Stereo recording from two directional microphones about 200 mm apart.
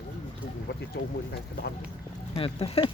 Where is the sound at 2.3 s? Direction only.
30° left (ahead or behind).